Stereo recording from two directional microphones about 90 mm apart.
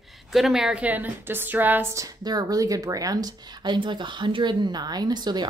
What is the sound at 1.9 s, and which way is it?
A woman's voice, 45° right (ahead or behind).